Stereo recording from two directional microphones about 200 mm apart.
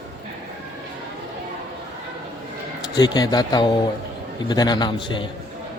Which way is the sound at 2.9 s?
20° left (ahead or behind).